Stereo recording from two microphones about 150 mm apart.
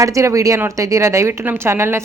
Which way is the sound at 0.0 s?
20° right (ahead or behind).